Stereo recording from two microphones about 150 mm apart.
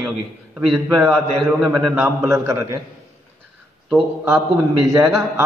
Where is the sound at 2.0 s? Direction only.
20° right (ahead or behind).